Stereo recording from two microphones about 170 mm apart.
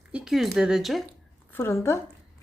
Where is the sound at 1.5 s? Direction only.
15° left (ahead or behind).